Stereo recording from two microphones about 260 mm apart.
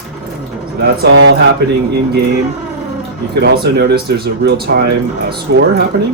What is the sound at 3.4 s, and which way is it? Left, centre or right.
Speech, right.